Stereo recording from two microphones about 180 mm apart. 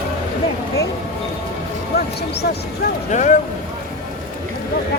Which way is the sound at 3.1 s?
40° left (ahead or behind).